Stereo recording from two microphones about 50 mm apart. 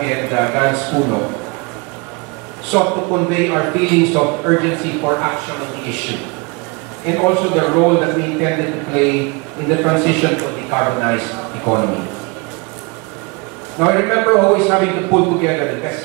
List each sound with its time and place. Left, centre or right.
0.0 s a man's voice: centre
2.7 s a man's voice: centre
7.1 s a man's voice: centre
13.7 s a man's voice: centre